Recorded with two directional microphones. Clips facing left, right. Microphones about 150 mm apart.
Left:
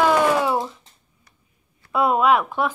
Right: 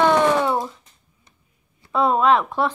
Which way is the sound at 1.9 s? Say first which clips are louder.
Right 1 dB; 5° left (ahead or behind).